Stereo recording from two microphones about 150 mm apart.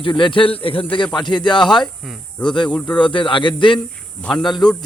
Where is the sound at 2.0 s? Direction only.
5° left (ahead or behind).